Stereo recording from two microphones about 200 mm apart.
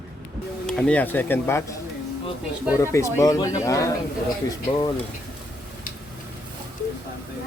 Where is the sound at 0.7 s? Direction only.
5° left (ahead or behind).